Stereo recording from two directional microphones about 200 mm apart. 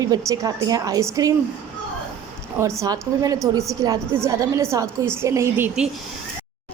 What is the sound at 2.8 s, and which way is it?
A woman's voice, 20° right (ahead or behind).